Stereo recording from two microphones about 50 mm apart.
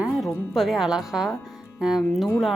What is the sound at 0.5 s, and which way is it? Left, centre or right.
A woman's voice, centre.